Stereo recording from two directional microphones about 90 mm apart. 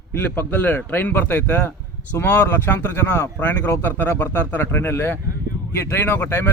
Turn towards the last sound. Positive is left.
turn(degrees=25)  # may be behind; listen again after turning